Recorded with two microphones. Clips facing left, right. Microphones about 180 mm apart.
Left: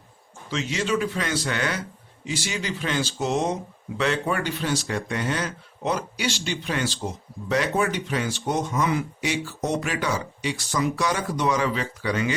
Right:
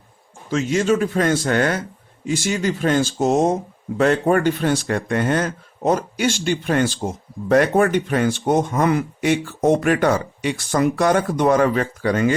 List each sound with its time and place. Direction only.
0.5 s speech: 45° right (ahead or behind)